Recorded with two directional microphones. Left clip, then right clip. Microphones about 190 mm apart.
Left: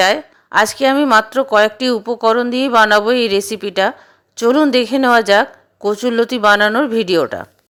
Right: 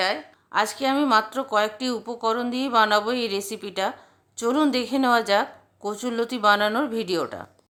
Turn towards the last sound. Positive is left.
turn(degrees=25)  # may be behind; listen again after turning